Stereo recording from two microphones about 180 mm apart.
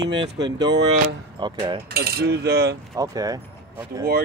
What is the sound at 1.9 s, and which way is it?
Speech, 60° right (ahead or behind).